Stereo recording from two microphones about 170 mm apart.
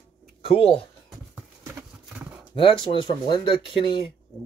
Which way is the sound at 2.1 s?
10° right (ahead or behind).